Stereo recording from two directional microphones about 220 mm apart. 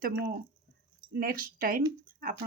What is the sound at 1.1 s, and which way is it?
Speech, 40° right (ahead or behind).